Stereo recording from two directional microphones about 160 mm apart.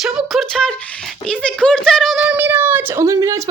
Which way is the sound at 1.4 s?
5° left (ahead or behind).